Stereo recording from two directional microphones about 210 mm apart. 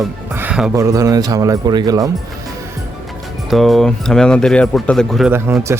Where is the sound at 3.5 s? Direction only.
Centre (ahead or behind).